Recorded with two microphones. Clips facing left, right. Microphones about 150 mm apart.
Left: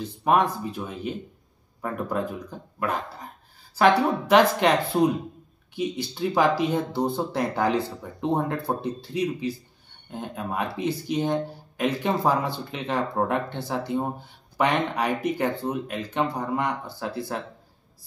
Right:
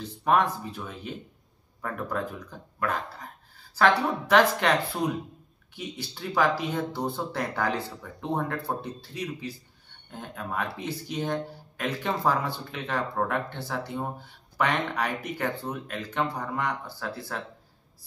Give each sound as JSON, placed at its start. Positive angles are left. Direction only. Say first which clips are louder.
{"t": 0.2, "sound": "speech", "louder": "left 2 dB", "side_deg": 15}